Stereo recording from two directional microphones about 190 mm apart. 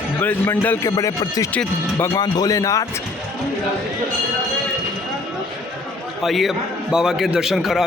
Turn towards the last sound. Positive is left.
turn(degrees=0)  # may be behind; listen again after turning